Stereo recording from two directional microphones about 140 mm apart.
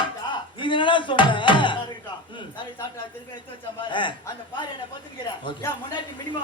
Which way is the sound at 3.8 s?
35° left (ahead or behind).